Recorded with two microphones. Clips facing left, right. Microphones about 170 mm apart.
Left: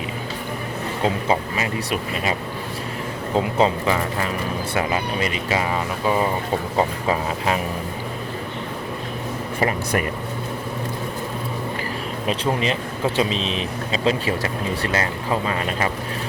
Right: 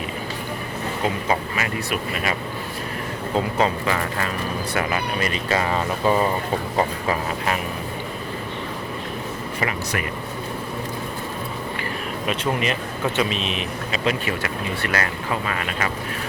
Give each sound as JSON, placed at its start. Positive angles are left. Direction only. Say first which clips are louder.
{"t": 1.0, "sound": "speech", "louder": "left 3 dB", "side_deg": 25}
{"t": 3.3, "sound": "speech", "louder": "left 2 dB", "side_deg": 20}
{"t": 9.6, "sound": "speech", "louder": "left 5 dB", "side_deg": 35}
{"t": 12.3, "sound": "speech", "louder": "left 2 dB", "side_deg": 30}